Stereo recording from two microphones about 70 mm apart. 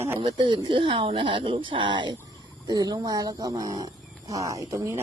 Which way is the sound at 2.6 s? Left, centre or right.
Right.